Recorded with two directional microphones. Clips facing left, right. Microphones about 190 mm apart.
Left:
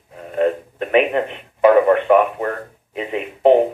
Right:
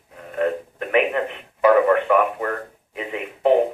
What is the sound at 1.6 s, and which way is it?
A man's voice, 25° left (ahead or behind).